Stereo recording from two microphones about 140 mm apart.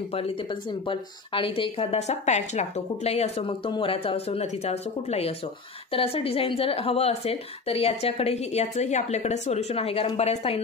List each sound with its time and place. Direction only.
0.1 s speech: 40° left (ahead or behind)